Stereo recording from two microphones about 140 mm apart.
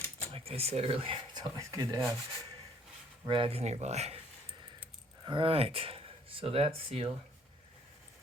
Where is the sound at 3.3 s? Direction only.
40° right (ahead or behind).